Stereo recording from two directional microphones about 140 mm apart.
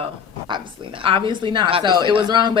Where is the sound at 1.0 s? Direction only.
40° right (ahead or behind).